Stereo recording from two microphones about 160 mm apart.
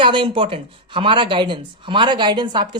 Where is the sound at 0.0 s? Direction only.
35° right (ahead or behind).